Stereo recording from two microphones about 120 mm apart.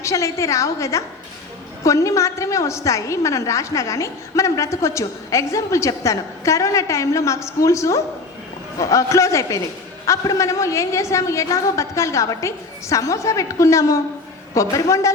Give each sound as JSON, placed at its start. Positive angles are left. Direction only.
{"t": 0.0, "sound": "a woman's voice", "side_deg": 25}